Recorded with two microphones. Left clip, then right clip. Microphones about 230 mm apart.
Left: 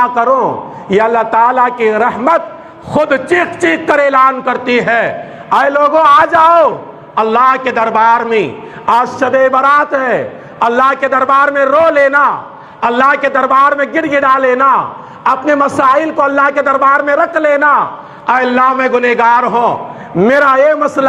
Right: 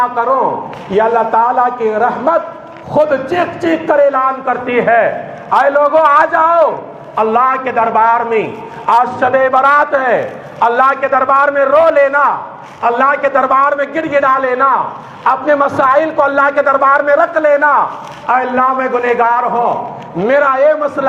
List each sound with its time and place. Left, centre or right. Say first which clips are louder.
0.0 s a man's voice: left 2 dB; left